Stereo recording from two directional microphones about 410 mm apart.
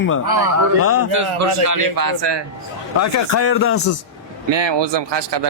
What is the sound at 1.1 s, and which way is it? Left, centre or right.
A man's voice, right.